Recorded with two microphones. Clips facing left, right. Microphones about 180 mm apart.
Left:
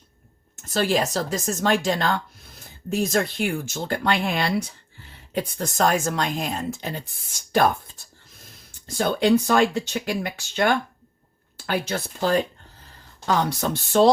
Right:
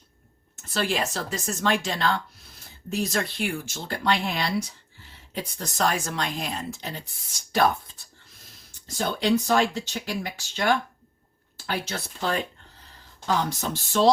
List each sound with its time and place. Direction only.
0.6 s speech: 40° left (ahead or behind); by 11.9 s 55° left (ahead or behind)
12.2 s speech: 40° left (ahead or behind)
13.2 s speech: 60° left (ahead or behind)